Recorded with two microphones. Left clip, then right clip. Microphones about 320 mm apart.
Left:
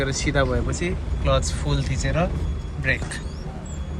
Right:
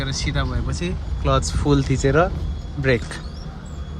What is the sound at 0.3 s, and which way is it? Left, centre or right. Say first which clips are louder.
Speech: left 5 dB; centre.